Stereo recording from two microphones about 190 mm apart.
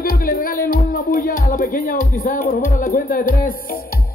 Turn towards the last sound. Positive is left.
turn(degrees=45)  # may be behind; listen again after turning